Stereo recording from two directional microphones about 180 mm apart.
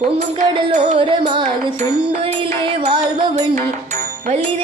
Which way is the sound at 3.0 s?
40° right (ahead or behind).